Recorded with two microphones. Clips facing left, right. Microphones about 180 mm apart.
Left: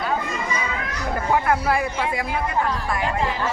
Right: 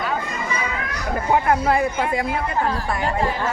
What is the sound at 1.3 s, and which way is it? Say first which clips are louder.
Speech: right 2 dB; 25° right (ahead or behind).